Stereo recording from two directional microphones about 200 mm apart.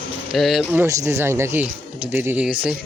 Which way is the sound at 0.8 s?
15° right (ahead or behind).